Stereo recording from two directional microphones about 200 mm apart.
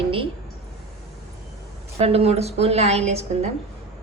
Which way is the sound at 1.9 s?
30° right (ahead or behind).